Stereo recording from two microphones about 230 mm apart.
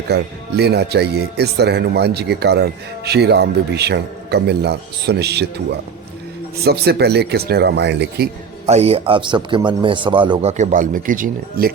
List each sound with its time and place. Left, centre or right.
0.1 s speech: right
6.7 s speech: right
8.6 s a man's voice: right
10.6 s speech: right